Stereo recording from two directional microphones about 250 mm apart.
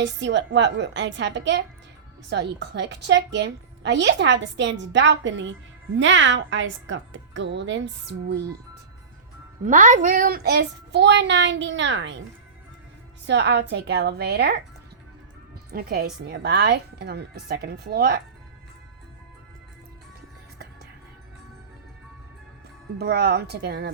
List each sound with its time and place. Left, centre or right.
0.0 s a woman's voice: right
9.6 s a woman's voice: right
13.2 s a woman's voice: right
15.7 s speech: right
23.0 s speech: right